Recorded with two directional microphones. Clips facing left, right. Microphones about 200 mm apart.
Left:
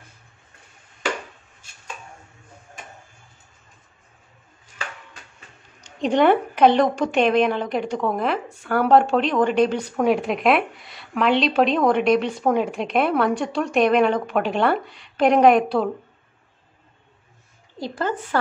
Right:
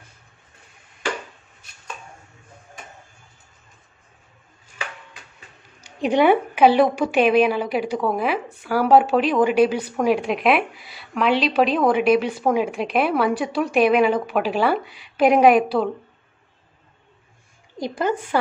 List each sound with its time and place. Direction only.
5.9 s a woman's voice: 10° right (ahead or behind)
17.7 s a woman's voice: 15° right (ahead or behind)